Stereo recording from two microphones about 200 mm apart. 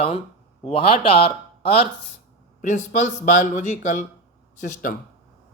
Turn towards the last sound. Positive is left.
turn(degrees=40)  # may be behind; listen again after turning